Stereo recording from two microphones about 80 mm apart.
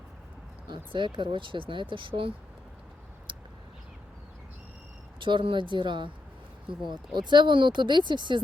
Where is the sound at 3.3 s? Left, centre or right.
Right.